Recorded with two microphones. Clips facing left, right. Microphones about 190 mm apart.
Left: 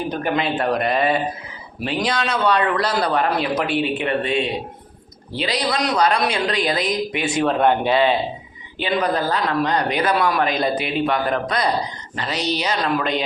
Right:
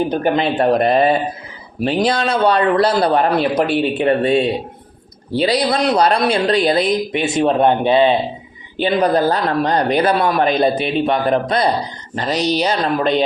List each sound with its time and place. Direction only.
0.1 s a man's voice: 35° right (ahead or behind)
8.8 s a man's voice: 35° right (ahead or behind)
12.1 s a man's voice: 40° right (ahead or behind)